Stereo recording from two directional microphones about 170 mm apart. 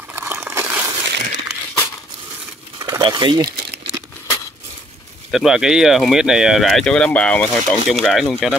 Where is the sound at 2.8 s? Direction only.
20° right (ahead or behind).